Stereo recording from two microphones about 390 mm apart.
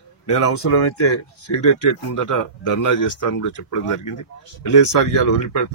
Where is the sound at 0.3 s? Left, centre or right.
Left.